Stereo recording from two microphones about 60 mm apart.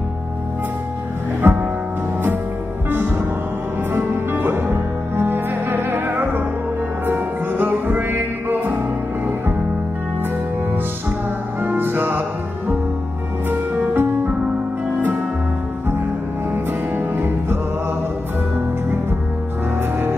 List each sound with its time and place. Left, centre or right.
1.4 s music: right
2.9 s music: right
11.6 s music: right
16.5 s music: right